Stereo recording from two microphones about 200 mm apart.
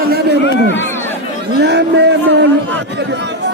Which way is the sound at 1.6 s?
55° right (ahead or behind).